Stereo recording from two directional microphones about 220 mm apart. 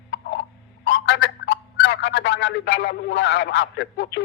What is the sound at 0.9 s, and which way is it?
Speech, 50° left (ahead or behind).